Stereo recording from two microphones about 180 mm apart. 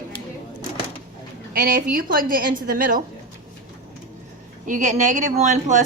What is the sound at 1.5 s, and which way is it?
A woman's voice, 55° right (ahead or behind).